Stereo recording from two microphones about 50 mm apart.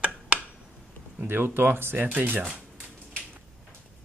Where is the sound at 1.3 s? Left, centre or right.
Right.